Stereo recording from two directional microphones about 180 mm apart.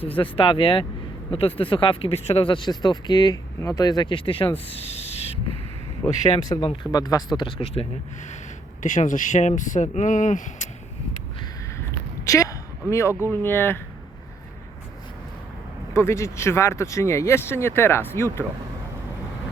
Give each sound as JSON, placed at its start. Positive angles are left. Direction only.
{"t": 0.2, "sound": "speech", "side_deg": 30}
{"t": 6.0, "sound": "speech", "side_deg": 15}
{"t": 8.8, "sound": "speech", "side_deg": 45}
{"t": 11.9, "sound": "a sound", "side_deg": 15}
{"t": 12.9, "sound": "speech", "side_deg": 15}
{"t": 15.9, "sound": "speech", "side_deg": 15}